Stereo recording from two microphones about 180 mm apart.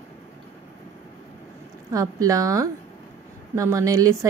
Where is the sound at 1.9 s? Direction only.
20° right (ahead or behind).